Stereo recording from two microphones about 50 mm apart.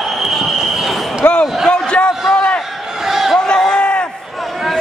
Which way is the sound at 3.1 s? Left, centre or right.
Centre.